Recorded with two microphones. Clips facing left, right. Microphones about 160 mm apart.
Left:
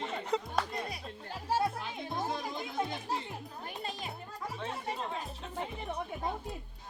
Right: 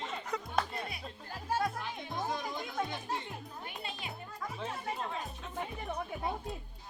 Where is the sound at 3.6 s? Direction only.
40° left (ahead or behind).